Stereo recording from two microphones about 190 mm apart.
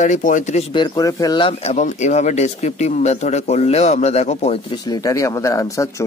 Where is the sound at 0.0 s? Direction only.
40° left (ahead or behind).